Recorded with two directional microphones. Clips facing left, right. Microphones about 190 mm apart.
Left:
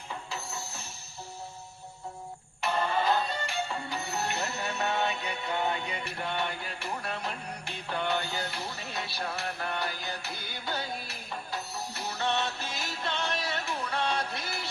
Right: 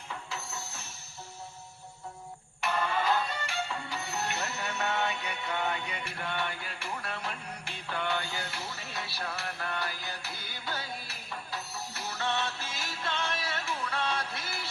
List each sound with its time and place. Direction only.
0.1 s music: 30° left (ahead or behind)
2.6 s music: 30° left (ahead or behind)
7.9 s music: 20° left (ahead or behind)
8.1 s music: 35° left (ahead or behind)
8.5 s music: 15° left (ahead or behind)